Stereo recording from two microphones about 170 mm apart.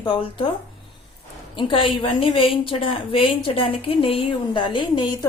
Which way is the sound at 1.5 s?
30° left (ahead or behind).